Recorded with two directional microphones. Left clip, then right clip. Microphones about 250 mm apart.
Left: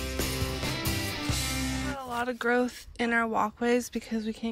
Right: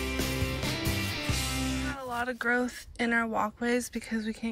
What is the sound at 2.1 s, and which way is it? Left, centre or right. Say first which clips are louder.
Speech: left 1 dB; centre.